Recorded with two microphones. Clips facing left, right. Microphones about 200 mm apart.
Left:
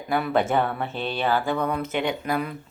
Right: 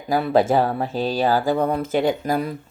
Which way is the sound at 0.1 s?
35° right (ahead or behind).